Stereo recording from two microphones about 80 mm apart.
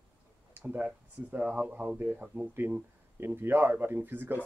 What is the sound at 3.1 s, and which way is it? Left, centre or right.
Speech, right.